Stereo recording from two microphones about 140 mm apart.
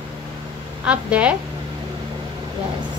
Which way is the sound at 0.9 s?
10° right (ahead or behind).